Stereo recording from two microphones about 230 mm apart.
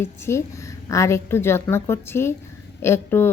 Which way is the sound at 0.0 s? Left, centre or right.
Centre.